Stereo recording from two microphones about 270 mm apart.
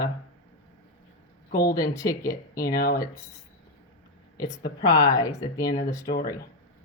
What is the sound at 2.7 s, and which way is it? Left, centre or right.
Speech, left.